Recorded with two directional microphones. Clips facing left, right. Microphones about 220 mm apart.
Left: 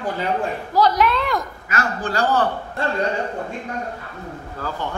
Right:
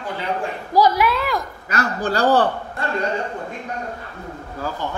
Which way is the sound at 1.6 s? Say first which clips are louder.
Right 2 dB; 35° right (ahead or behind).